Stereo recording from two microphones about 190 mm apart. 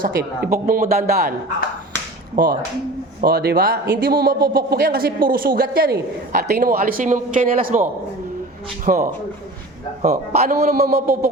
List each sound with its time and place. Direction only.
0.0 s speech: 50° right (ahead or behind)
2.3 s speech: 45° right (ahead or behind)
10.7 s speech: 50° right (ahead or behind)